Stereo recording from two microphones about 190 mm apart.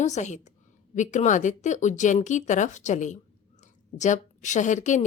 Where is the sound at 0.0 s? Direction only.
40° left (ahead or behind).